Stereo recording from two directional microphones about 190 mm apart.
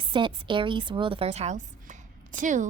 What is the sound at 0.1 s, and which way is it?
A woman's voice, 25° right (ahead or behind).